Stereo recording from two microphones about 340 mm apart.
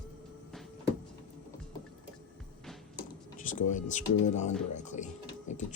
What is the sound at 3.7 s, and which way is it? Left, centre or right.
Speech, left.